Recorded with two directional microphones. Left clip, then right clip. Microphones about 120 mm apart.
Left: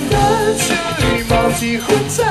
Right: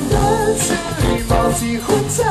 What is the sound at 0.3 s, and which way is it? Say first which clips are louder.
Music: left 2 dB; 15° left (ahead or behind).